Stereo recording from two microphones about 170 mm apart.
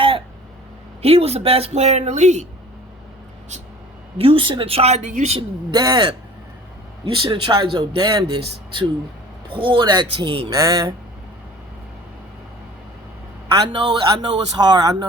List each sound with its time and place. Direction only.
1.0 s speech: 35° right (ahead or behind)
4.2 s speech: 30° right (ahead or behind)
5.7 s speech: 25° right (ahead or behind)
9.6 s speech: 30° right (ahead or behind)
10.5 s speech: 20° right (ahead or behind)
13.6 s speech: 25° right (ahead or behind)